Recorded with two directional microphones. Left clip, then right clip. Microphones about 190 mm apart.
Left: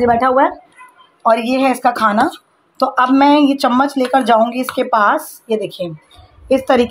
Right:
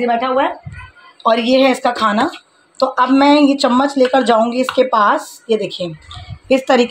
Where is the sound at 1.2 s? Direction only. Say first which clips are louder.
Right 1 dB; centre (ahead or behind).